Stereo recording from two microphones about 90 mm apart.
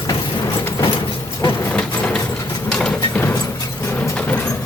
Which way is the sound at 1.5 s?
20° left (ahead or behind).